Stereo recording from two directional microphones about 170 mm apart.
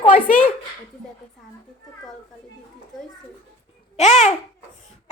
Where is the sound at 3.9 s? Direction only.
40° left (ahead or behind).